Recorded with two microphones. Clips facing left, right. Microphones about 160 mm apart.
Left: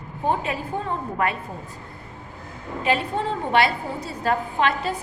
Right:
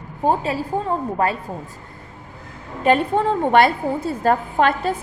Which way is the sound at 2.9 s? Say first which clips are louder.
Right 7 dB; 50° right (ahead or behind).